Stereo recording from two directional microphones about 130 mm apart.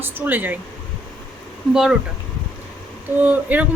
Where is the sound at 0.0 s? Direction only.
15° right (ahead or behind).